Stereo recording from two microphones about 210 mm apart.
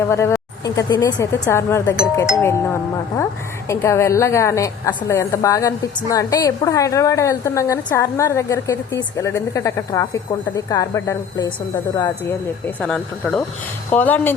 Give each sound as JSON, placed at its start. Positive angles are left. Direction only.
{"t": 0.1, "sound": "a woman's voice", "side_deg": 15}